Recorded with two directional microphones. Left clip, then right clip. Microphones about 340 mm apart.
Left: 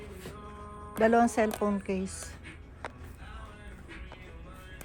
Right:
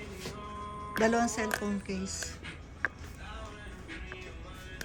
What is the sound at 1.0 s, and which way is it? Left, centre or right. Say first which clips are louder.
Speech: left 4 dB; centre.